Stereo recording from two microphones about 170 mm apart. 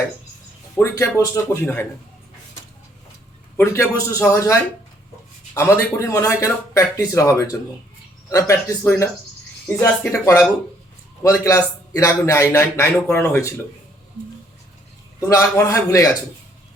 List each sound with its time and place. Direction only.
0.8 s a man's voice: 15° left (ahead or behind)
3.6 s a man's voice: 15° left (ahead or behind)
5.5 s a man's voice: 20° left (ahead or behind)
15.3 s speech: 20° left (ahead or behind)